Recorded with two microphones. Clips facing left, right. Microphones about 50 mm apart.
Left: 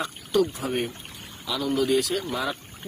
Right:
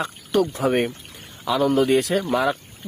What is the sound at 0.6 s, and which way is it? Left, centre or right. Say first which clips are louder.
Speech: right 7 dB; right.